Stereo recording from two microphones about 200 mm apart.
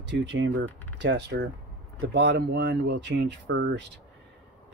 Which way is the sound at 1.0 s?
60° right (ahead or behind).